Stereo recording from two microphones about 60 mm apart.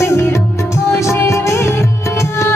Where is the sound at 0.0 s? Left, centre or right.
Left.